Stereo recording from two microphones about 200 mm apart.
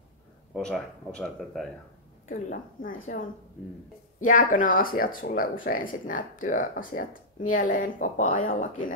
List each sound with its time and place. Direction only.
0.6 s speech: 5° left (ahead or behind)
2.2 s speech: 40° left (ahead or behind)